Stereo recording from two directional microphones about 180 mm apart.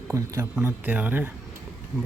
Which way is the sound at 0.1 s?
15° right (ahead or behind).